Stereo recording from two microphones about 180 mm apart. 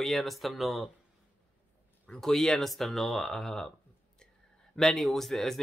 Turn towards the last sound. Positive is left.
turn(degrees=0)  # may be behind; listen again after turning